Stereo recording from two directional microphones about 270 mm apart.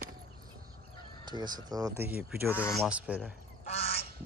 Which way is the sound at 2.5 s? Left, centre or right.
Centre.